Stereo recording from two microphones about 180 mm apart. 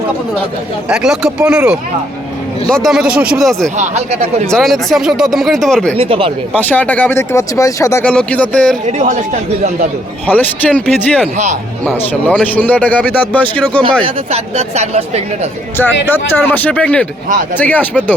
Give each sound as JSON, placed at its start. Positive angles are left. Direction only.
{"t": 0.9, "sound": "speech", "side_deg": -5}
{"t": 3.8, "sound": "speech", "side_deg": -35}
{"t": 4.4, "sound": "speech", "side_deg": 0}
{"t": 6.0, "sound": "speech", "side_deg": -30}
{"t": 6.6, "sound": "speech", "side_deg": 10}
{"t": 8.0, "sound": "speech", "side_deg": 5}
{"t": 8.9, "sound": "speech", "side_deg": -40}
{"t": 10.2, "sound": "speech", "side_deg": 10}
{"t": 11.9, "sound": "speech", "side_deg": 10}
{"t": 14.0, "sound": "speech", "side_deg": -35}
{"t": 16.0, "sound": "speech", "side_deg": 10}